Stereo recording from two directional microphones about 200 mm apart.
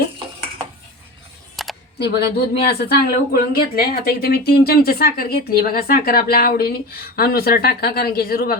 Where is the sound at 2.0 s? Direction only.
55° left (ahead or behind).